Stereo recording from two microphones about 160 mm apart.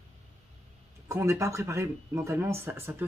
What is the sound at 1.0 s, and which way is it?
Speech, 15° right (ahead or behind).